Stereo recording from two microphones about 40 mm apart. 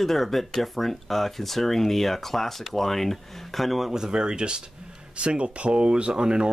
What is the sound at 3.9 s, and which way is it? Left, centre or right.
Speech, centre.